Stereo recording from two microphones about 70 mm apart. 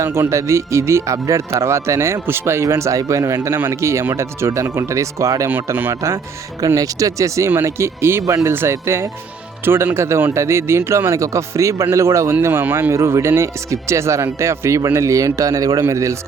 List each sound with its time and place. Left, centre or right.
0.0 s speech: right
12.9 s speech: right